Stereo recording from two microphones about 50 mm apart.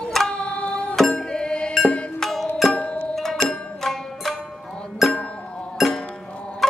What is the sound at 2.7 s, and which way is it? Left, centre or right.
Music, left.